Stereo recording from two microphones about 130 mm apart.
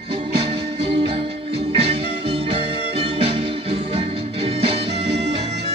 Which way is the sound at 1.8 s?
45° right (ahead or behind).